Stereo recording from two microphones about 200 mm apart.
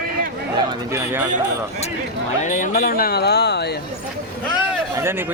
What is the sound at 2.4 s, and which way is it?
Speech, 40° left (ahead or behind).